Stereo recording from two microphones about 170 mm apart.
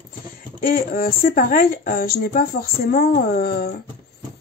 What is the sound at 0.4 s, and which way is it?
Speech, 55° left (ahead or behind).